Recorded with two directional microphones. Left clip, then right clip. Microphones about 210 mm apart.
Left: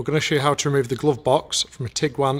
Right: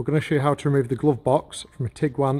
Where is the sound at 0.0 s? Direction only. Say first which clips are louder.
Left 2 dB; 10° right (ahead or behind).